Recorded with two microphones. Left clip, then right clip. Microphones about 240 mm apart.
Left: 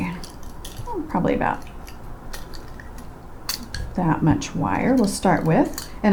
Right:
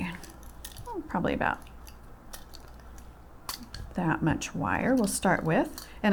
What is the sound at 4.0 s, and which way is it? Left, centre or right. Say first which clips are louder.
Speech: left 7 dB; right.